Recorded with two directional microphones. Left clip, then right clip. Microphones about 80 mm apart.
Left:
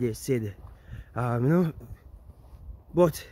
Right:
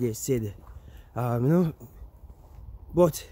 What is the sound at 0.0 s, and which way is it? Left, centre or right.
Speech, right.